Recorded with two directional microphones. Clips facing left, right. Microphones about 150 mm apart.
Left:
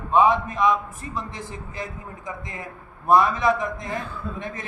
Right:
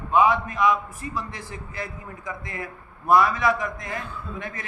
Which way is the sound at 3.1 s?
25° left (ahead or behind).